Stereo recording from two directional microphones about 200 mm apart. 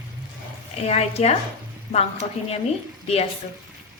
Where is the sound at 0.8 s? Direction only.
30° left (ahead or behind).